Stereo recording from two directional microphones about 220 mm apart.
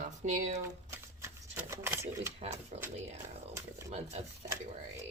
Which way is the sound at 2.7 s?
35° right (ahead or behind).